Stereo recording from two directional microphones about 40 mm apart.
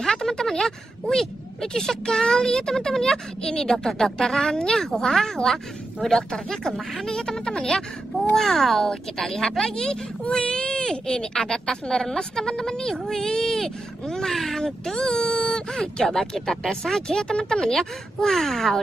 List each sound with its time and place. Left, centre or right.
0.0 s speech: centre
17.7 s speech: centre